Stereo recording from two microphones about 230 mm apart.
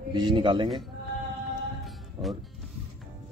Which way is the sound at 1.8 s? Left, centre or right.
Centre.